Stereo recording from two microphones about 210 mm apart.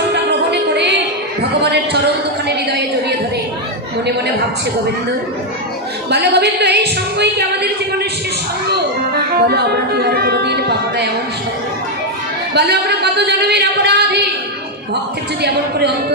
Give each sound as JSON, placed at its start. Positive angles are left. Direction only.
{"t": 0.1, "sound": "music", "side_deg": -55}
{"t": 1.6, "sound": "a sound", "side_deg": -50}
{"t": 6.0, "sound": "speech", "side_deg": -50}
{"t": 12.5, "sound": "speech", "side_deg": -50}